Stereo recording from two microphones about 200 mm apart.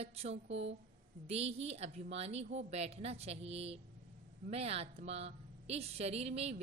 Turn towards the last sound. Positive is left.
turn(degrees=-30)  # may be behind; listen again after turning